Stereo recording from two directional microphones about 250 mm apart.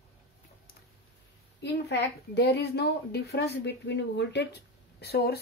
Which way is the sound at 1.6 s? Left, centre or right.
Left.